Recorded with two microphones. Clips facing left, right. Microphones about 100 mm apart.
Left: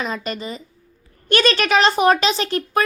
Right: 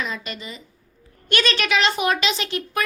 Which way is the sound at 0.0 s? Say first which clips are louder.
Left 5 dB; 40° left (ahead or behind).